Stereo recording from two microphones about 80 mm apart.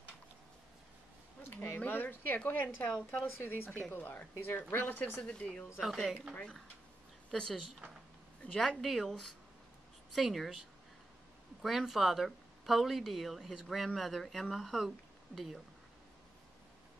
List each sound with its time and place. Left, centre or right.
1.4 s a sound: left
1.8 s a woman's voice: left
5.2 s speech: centre
5.8 s speech: centre
7.2 s a woman's voice: centre
8.5 s speech: centre
11.6 s speech: centre